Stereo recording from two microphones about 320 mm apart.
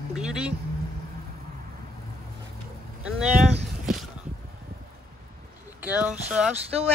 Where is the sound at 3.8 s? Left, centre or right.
Centre.